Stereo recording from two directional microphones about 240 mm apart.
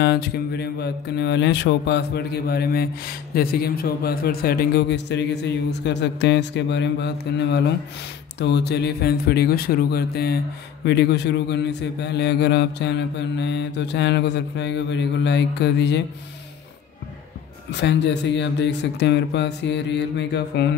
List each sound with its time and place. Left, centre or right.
0.0 s a man's voice: left
17.6 s a man's voice: left